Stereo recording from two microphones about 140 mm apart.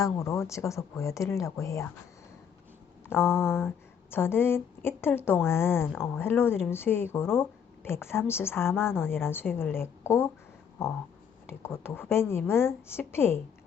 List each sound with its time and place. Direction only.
0.0 s speech: 20° left (ahead or behind)
3.1 s speech: 15° left (ahead or behind)
11.4 s speech: 15° left (ahead or behind)